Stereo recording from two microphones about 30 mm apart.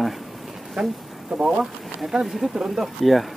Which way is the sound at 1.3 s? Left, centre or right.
Right.